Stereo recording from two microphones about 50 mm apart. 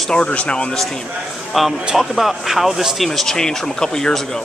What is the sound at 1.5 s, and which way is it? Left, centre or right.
A man's voice, centre.